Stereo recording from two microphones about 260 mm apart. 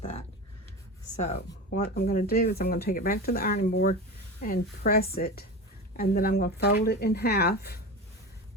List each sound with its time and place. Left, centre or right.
1.7 s speech: left